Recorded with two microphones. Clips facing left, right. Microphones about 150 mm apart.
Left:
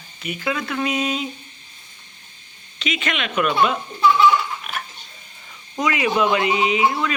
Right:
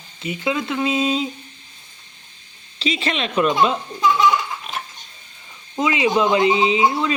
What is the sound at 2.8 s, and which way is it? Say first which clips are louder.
Speech: right 3 dB; 30° right (ahead or behind).